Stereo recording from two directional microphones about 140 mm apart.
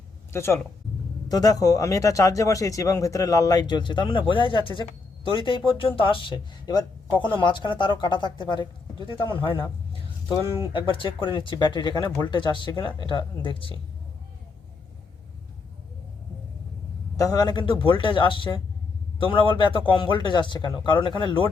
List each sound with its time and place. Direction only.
0.3 s speech: 20° left (ahead or behind); by 13.7 s 40° left (ahead or behind)
17.2 s speech: 30° left (ahead or behind)